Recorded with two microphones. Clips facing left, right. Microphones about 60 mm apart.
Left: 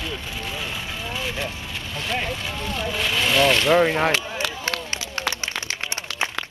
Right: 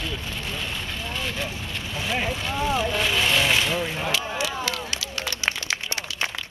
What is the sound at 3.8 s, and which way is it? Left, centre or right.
Speech, left.